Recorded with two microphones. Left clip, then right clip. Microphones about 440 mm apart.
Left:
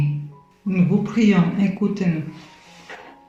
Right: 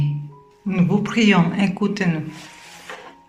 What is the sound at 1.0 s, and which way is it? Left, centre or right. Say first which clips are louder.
A man's voice: right 5 dB; centre.